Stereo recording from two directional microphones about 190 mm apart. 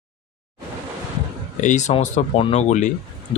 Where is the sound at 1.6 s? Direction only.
40° left (ahead or behind).